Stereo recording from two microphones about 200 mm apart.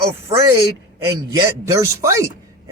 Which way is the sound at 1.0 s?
15° right (ahead or behind).